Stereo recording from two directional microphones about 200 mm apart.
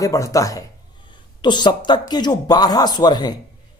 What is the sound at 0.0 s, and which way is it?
Speech, 15° left (ahead or behind).